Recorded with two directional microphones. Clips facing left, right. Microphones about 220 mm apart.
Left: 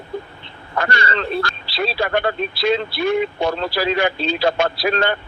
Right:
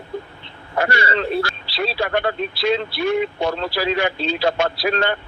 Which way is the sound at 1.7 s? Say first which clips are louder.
Left 1 dB; 45° left (ahead or behind).